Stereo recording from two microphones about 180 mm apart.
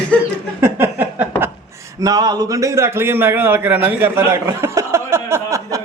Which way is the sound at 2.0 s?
20° right (ahead or behind).